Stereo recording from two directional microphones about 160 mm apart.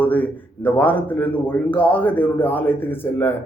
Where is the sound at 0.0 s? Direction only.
10° left (ahead or behind).